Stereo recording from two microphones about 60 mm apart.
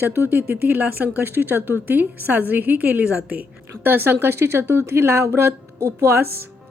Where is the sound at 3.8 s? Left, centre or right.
Right.